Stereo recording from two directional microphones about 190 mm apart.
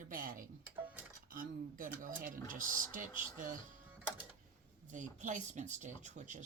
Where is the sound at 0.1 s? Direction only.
45° right (ahead or behind).